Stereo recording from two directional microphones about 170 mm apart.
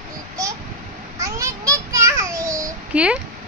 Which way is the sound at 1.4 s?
20° right (ahead or behind).